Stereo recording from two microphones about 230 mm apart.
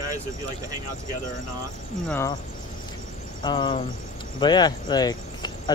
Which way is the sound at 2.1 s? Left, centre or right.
Centre.